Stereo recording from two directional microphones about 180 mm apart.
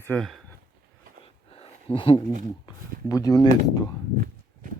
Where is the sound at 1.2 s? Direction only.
30° left (ahead or behind).